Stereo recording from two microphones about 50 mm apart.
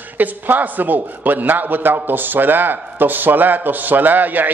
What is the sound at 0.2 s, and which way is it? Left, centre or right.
A man's voice, right.